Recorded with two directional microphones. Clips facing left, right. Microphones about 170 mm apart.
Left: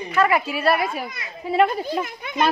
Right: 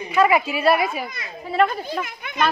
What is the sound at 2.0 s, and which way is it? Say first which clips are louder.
Speech: left 1 dB; 30° left (ahead or behind).